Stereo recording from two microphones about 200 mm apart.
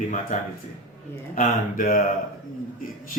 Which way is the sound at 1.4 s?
40° left (ahead or behind).